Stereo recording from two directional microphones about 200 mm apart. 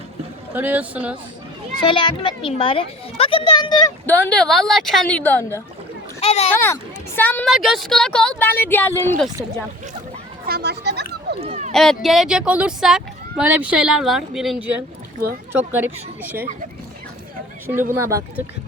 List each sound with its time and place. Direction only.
0.5 s speech: 10° right (ahead or behind)
1.8 s a child's voice: 25° left (ahead or behind)
4.0 s speech: 5° left (ahead or behind)
6.1 s a child's voice: 30° left (ahead or behind)
6.5 s a child's voice: 10° left (ahead or behind)
10.4 s speech: 55° right (ahead or behind)
11.3 s a sound: 35° right (ahead or behind)
11.7 s speech: 5° left (ahead or behind)
17.9 s speech: 15° right (ahead or behind)